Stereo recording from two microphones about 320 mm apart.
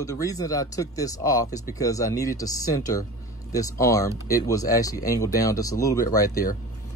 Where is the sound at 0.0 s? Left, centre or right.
Centre.